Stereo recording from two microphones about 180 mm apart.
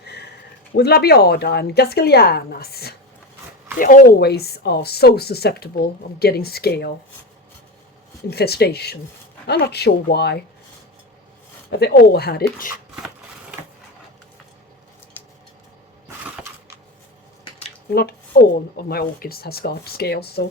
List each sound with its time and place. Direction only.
0.0 s a sound: 65° left (ahead or behind)
0.8 s speech: 60° left (ahead or behind)
3.8 s speech: 50° left (ahead or behind)
8.3 s speech: 60° left (ahead or behind)
11.7 s speech: 65° left (ahead or behind)
17.9 s speech: 60° left (ahead or behind)